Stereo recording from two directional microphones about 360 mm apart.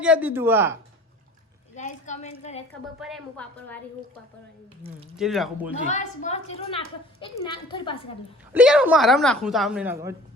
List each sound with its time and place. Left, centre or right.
0.0 s a woman's voice: centre
1.7 s a woman's voice: centre
3.0 s a woman's voice: centre
5.1 s a woman's voice: centre
5.9 s a woman's voice: centre
8.5 s a woman's voice: centre